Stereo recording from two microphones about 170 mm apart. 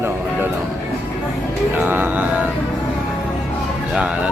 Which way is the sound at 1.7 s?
10° right (ahead or behind).